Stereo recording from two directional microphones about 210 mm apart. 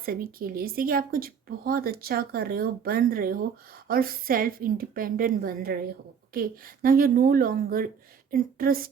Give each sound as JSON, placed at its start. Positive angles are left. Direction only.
{"t": 0.0, "sound": "a woman's voice", "side_deg": -45}